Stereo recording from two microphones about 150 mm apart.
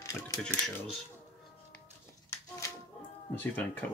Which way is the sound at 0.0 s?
20° left (ahead or behind).